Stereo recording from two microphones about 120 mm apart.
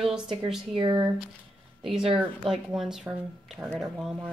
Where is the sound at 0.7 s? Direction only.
40° right (ahead or behind).